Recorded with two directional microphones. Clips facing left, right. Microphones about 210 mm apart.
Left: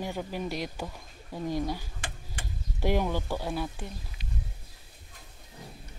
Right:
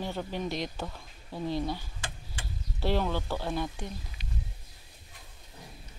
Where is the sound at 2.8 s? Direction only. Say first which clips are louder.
Left 1 dB; 15° left (ahead or behind).